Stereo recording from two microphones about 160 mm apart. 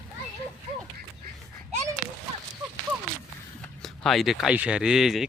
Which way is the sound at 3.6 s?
Centre (ahead or behind).